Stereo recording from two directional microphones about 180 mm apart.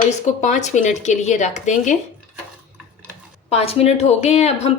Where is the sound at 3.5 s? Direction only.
35° left (ahead or behind).